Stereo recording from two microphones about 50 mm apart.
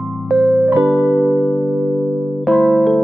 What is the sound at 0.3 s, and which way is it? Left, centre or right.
Electric piano, centre.